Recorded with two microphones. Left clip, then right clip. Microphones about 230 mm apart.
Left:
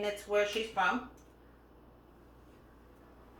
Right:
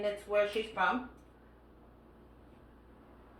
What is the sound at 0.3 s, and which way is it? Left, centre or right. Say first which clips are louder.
Speech: even; left.